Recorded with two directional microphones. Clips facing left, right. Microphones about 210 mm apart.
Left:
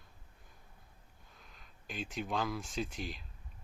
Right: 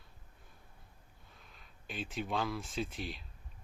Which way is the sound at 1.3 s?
Centre (ahead or behind).